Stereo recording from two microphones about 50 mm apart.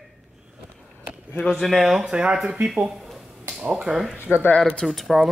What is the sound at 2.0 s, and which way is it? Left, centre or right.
Speech, centre.